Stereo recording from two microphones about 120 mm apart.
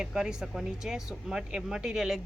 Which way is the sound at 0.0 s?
5° right (ahead or behind).